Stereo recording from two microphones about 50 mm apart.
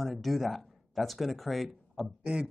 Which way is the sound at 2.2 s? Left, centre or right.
Centre.